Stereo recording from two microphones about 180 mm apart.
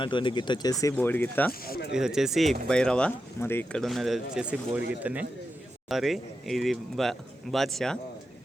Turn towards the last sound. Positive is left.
turn(degrees=0)  # may be behind; listen again after turning